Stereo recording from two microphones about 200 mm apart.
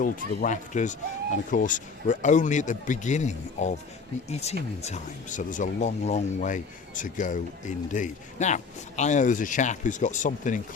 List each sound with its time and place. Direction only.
0.0 s speech: 40° left (ahead or behind)